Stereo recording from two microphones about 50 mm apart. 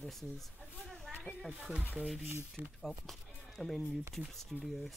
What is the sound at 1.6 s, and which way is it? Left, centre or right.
Speech, right.